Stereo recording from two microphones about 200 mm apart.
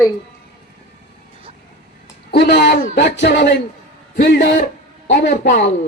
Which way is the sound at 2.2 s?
55° left (ahead or behind).